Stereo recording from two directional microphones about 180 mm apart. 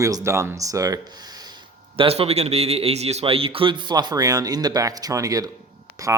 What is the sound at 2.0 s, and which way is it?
Speech, 35° right (ahead or behind).